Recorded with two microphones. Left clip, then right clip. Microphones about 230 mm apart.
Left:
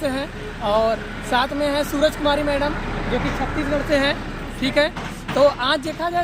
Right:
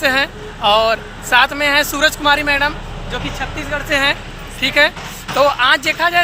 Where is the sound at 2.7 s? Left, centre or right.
Right.